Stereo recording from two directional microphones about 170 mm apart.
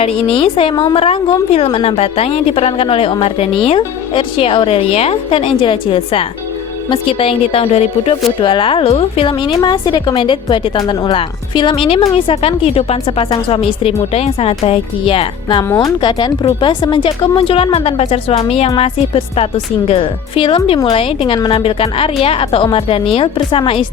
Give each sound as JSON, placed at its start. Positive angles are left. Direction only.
{"t": 0.0, "sound": "a woman's voice", "side_deg": 35}